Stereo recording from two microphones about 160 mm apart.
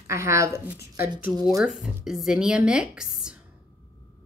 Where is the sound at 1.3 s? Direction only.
Centre (ahead or behind).